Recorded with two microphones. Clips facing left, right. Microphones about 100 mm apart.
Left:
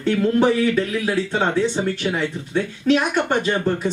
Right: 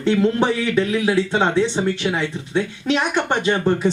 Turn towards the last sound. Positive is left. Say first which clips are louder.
# right 2 dB
turn(degrees=-25)  # may be behind; listen again after turning